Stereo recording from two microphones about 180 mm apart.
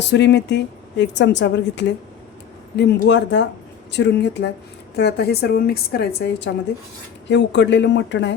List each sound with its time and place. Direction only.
0.0 s a woman's voice: 75° left (ahead or behind)
7.3 s speech: 80° left